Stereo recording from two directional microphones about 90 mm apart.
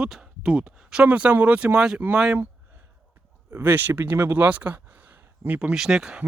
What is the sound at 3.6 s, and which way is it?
Speech, 20° right (ahead or behind).